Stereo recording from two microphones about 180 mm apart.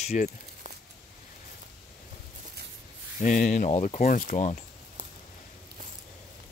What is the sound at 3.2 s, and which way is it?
Speech, 45° left (ahead or behind).